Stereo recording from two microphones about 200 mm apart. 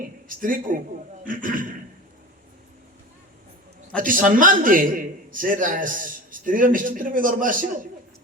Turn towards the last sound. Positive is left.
turn(degrees=-45)  # may be behind; listen again after turning